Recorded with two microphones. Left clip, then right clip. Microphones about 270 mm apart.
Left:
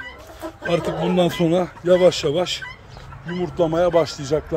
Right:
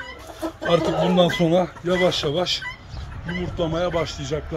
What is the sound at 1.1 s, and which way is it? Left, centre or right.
Speech, centre.